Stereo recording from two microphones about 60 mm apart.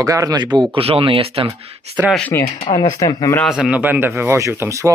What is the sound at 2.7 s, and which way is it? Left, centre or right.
Speech, left.